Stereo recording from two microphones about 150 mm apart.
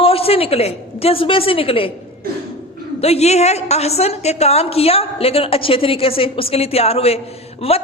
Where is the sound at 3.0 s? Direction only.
45° left (ahead or behind).